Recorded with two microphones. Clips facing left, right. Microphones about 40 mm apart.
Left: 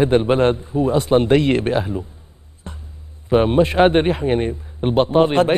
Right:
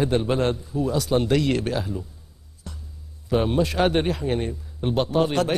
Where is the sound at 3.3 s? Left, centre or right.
Left.